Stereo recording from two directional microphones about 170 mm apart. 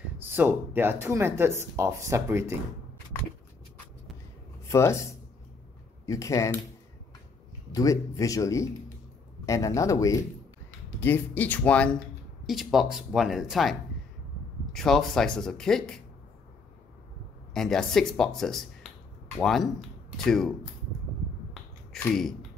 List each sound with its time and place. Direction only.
0.2 s speech: 10° right (ahead or behind)
4.6 s speech: 15° left (ahead or behind)
6.0 s speech: 20° left (ahead or behind)
7.7 s a man's voice: 20° left (ahead or behind); by 16.0 s 5° left (ahead or behind)
17.6 s speech: centre (ahead or behind)
21.9 s speech: 5° left (ahead or behind)